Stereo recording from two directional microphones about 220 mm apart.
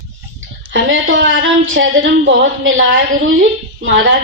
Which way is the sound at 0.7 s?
60° right (ahead or behind).